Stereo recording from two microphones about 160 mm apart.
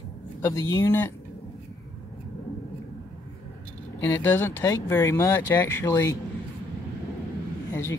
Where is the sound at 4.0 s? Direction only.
15° left (ahead or behind).